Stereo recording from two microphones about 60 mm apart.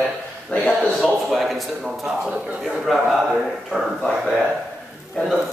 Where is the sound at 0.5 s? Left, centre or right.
Left.